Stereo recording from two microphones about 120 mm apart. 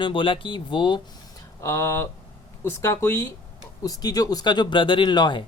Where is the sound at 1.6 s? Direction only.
25° left (ahead or behind).